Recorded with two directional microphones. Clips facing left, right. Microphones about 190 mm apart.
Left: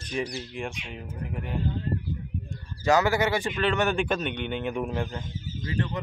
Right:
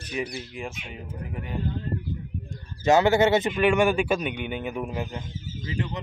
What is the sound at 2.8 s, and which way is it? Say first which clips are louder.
Speech: right 4 dB; 25° right (ahead or behind).